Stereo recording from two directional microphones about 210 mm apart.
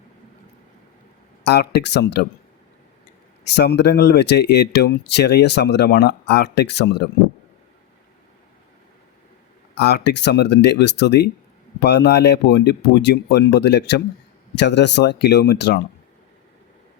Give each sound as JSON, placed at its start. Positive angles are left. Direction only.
{"t": 1.5, "sound": "speech", "side_deg": 50}
{"t": 3.5, "sound": "speech", "side_deg": 55}
{"t": 9.7, "sound": "speech", "side_deg": 50}